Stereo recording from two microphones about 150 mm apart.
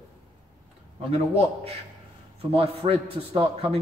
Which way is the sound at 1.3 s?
40° right (ahead or behind).